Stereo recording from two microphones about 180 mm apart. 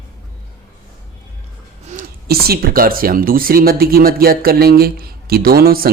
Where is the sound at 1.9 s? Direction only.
55° right (ahead or behind).